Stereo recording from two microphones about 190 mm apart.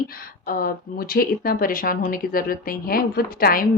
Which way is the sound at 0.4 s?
50° left (ahead or behind).